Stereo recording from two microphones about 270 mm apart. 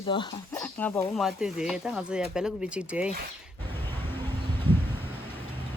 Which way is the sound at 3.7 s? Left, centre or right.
Centre.